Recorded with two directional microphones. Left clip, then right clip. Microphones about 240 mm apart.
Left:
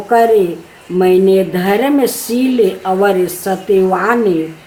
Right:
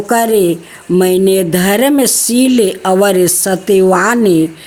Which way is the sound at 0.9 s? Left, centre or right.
Right.